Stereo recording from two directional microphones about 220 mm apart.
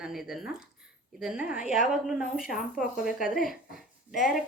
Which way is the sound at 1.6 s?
35° left (ahead or behind).